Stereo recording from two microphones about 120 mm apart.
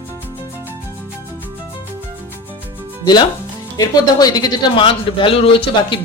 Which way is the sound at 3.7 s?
30° left (ahead or behind).